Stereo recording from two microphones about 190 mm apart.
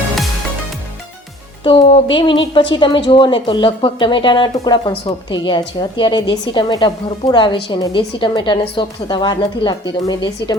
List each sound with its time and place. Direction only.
1.6 s speech: 25° left (ahead or behind)